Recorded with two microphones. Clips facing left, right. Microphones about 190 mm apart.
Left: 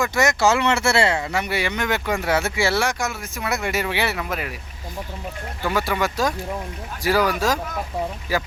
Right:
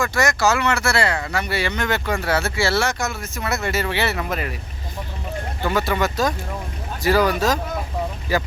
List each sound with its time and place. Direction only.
0.0 s speech: 20° left (ahead or behind)
5.6 s speech: 10° left (ahead or behind)